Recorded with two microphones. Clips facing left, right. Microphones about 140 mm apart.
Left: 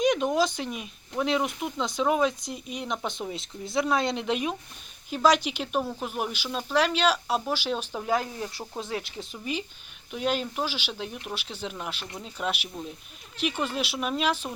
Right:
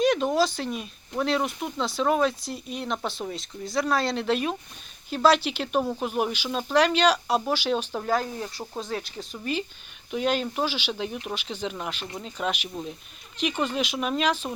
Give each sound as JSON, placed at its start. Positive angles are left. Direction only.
{"t": 0.0, "sound": "a sound", "side_deg": 15}
{"t": 0.3, "sound": "speech", "side_deg": 15}
{"t": 6.0, "sound": "speech", "side_deg": 0}
{"t": 8.0, "sound": "speech", "side_deg": 15}
{"t": 9.4, "sound": "speech", "side_deg": 10}
{"t": 13.6, "sound": "speech", "side_deg": 5}